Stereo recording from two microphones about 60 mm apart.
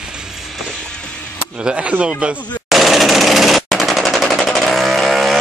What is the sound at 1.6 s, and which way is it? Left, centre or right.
Speech, centre.